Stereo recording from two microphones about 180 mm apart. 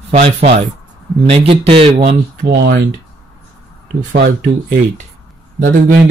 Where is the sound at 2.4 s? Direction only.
80° right.